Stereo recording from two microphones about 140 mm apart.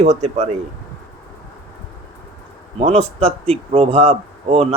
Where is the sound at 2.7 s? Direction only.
45° right (ahead or behind).